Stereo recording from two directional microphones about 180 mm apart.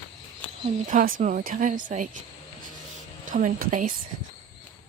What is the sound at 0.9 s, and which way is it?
Speech, 50° right (ahead or behind).